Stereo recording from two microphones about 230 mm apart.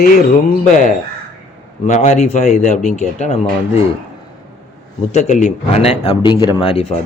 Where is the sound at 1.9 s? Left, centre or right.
Left.